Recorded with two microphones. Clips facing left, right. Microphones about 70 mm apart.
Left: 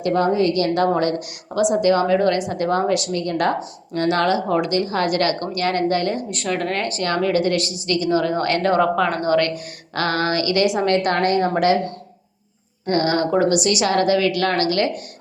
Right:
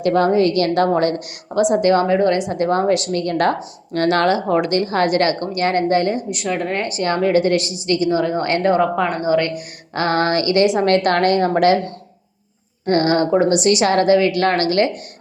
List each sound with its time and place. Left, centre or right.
0.0 s a woman's voice: right
0.7 s a woman's voice: right
2.0 s a woman's voice: right
3.1 s a woman's voice: right
6.3 s a woman's voice: centre
9.9 s a sound: right
10.2 s a woman's voice: right
10.8 s a woman's voice: right
12.8 s a woman's voice: right